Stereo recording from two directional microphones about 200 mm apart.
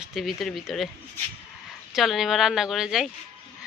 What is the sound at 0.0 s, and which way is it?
Speech, centre (ahead or behind).